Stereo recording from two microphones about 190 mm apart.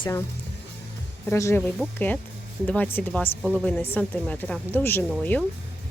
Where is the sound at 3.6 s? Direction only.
10° left (ahead or behind).